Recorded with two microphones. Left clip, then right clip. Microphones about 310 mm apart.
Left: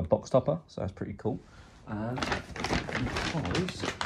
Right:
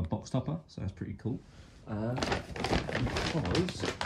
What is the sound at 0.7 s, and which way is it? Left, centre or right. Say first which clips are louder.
Speech: left 7 dB; centre.